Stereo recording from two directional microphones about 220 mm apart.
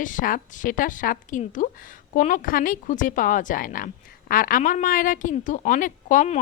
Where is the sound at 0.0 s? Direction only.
35° left (ahead or behind).